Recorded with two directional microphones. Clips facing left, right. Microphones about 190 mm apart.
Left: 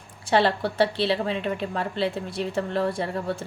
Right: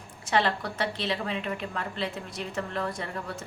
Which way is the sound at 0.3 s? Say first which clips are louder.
Left 5 dB; 30° left (ahead or behind).